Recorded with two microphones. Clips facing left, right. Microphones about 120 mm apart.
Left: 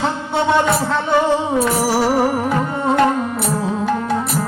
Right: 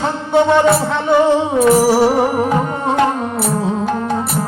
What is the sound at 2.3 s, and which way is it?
Music, 25° right (ahead or behind).